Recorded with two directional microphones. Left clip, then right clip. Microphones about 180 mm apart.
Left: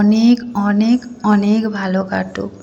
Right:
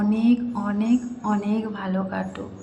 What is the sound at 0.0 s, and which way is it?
A woman's voice, 30° left (ahead or behind).